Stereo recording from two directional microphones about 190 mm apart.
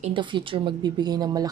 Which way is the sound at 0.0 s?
25° right (ahead or behind).